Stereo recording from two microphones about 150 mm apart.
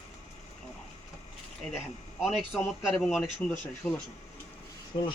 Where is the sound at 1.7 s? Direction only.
Centre (ahead or behind).